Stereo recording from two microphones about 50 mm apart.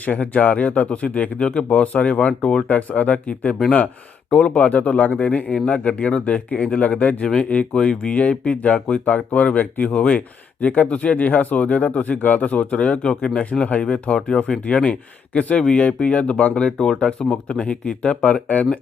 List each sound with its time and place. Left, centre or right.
0.0 s speech: left